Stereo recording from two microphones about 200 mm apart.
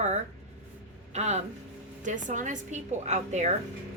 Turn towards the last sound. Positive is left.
turn(degrees=-35)  # may be behind; listen again after turning